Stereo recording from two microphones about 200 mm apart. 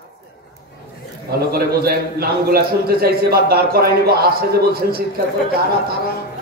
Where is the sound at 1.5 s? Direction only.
50° right (ahead or behind).